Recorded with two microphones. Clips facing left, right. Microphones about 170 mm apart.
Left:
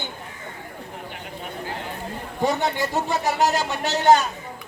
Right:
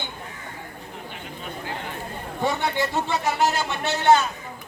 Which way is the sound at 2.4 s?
40° left (ahead or behind).